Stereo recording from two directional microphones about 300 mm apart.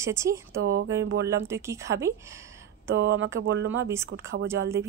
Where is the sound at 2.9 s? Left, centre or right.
Right.